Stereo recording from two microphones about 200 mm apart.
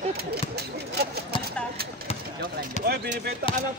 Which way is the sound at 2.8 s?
35° left (ahead or behind).